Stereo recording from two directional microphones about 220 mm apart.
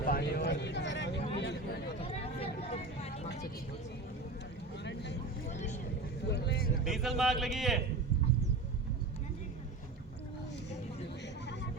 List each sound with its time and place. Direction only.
0.0 s a sound: 40° left (ahead or behind)
2.0 s vehicle: 25° left (ahead or behind)
4.8 s vehicle: 50° left (ahead or behind)
5.5 s vehicle: 30° left (ahead or behind)
6.2 s vehicle: 50° left (ahead or behind)
6.8 s speech: centre (ahead or behind)